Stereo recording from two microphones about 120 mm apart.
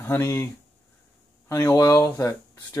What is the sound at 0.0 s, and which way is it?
Speech, 20° left (ahead or behind).